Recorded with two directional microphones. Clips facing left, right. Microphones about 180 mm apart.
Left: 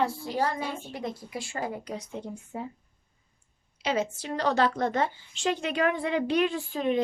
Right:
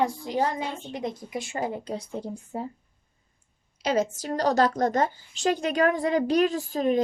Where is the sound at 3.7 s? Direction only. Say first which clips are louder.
Right 3 dB; 40° right (ahead or behind).